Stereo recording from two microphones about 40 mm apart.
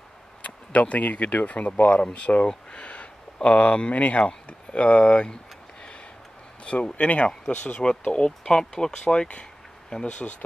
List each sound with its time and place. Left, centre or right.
0.4 s speech: left
6.6 s speech: left
9.0 s speech: left